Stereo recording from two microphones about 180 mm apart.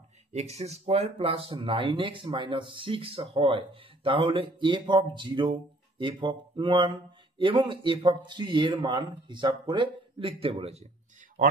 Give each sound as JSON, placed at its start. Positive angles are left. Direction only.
{"t": 0.3, "sound": "speech", "side_deg": -35}